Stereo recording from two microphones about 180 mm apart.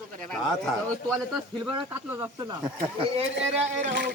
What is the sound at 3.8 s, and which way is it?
Speech, 70° right (ahead or behind).